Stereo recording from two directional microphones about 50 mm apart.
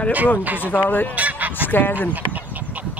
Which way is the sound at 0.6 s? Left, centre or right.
Left.